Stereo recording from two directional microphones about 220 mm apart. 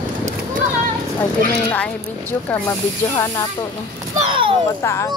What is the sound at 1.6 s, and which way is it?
Speech, 5° left (ahead or behind).